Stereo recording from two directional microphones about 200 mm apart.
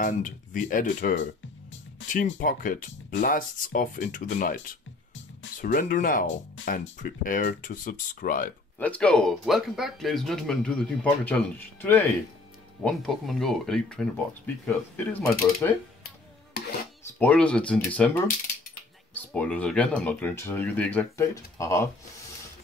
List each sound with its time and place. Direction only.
0.0 s speech: 40° left (ahead or behind)
2.3 s speech: 45° left (ahead or behind)
5.6 s speech: 45° left (ahead or behind)
8.7 s speech: 5° left (ahead or behind)
17.2 s speech: 5° left (ahead or behind)